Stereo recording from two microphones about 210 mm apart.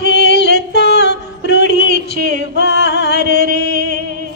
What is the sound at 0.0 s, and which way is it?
Music, 55° left (ahead or behind).